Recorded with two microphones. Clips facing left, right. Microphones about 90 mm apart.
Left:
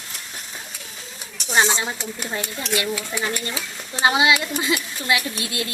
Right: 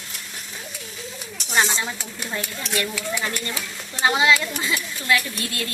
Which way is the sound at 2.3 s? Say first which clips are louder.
Left 2 dB; 20° left (ahead or behind).